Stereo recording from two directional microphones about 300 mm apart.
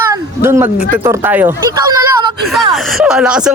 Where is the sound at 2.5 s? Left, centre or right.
Centre.